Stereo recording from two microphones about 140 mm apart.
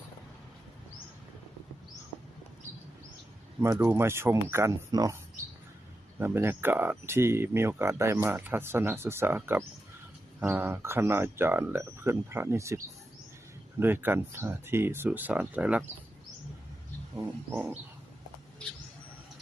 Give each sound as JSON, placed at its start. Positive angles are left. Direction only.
{"t": 3.6, "sound": "speech", "side_deg": -20}
{"t": 6.1, "sound": "speech", "side_deg": -15}